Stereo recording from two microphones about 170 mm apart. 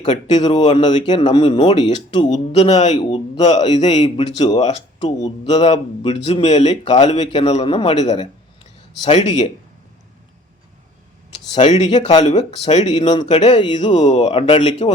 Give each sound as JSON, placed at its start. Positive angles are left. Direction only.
{"t": 0.3, "sound": "speech", "side_deg": 40}
{"t": 2.2, "sound": "speech", "side_deg": 40}
{"t": 9.0, "sound": "speech", "side_deg": 40}
{"t": 11.5, "sound": "speech", "side_deg": 40}